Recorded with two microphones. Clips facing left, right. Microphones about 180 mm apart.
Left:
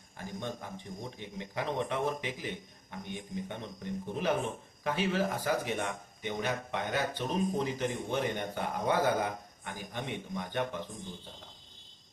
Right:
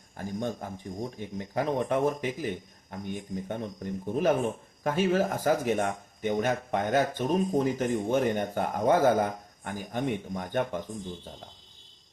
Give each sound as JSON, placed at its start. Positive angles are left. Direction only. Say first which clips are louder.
{"t": 0.3, "sound": "speech", "louder": "right 6 dB", "side_deg": -45}